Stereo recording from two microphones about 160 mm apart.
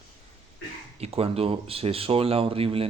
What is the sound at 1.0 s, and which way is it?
Speech, 40° right (ahead or behind).